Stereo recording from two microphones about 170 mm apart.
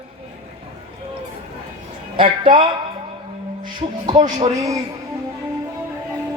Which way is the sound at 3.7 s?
25° right (ahead or behind).